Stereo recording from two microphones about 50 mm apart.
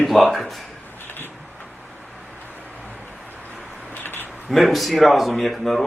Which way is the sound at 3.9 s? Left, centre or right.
Left.